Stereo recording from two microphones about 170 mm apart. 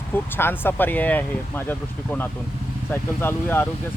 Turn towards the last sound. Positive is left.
turn(degrees=10)  # may be behind; listen again after turning